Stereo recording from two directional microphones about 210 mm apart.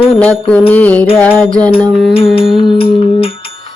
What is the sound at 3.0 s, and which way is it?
Music, 25° left (ahead or behind).